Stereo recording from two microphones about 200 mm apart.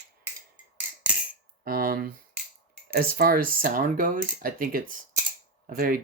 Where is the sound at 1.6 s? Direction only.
50° right (ahead or behind).